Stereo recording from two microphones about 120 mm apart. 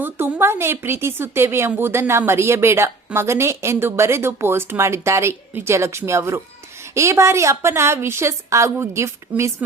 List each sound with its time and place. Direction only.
0.0 s a woman's voice: 20° right (ahead or behind)
9.6 s a woman's voice: 10° right (ahead or behind)